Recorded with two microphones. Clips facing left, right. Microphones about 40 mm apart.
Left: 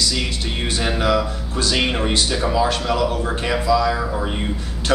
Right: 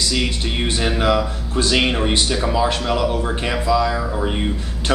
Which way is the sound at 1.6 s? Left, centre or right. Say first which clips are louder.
Right 3 dB; centre.